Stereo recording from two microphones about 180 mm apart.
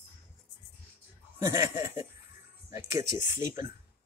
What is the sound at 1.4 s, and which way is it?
Speech, 20° right (ahead or behind).